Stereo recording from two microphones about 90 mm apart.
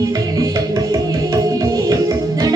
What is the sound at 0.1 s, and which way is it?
Music, 45° right (ahead or behind).